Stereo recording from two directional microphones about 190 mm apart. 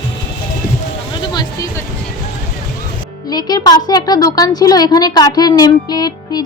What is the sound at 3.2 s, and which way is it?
A woman's voice, 20° left (ahead or behind).